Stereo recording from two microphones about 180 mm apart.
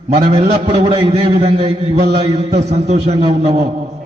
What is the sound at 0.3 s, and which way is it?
A man's voice, 30° right (ahead or behind).